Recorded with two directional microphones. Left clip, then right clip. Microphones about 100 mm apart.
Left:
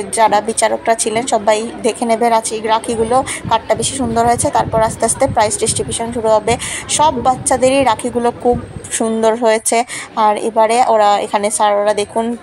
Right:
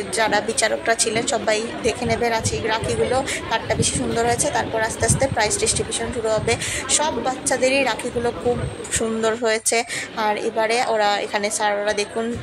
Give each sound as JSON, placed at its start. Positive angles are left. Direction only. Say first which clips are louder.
{"t": 0.2, "sound": "a woman's voice", "louder": "left 8 dB", "side_deg": 35}
{"t": 8.9, "sound": "a woman's voice", "louder": "left 8 dB", "side_deg": 35}